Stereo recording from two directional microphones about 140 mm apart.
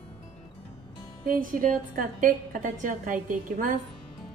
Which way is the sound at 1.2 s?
80° right.